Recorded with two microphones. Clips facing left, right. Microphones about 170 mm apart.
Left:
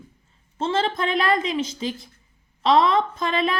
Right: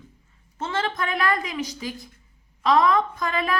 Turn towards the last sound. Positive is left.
turn(degrees=25)  # may be behind; listen again after turning